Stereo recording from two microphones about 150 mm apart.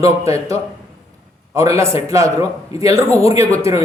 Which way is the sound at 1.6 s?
20° right (ahead or behind).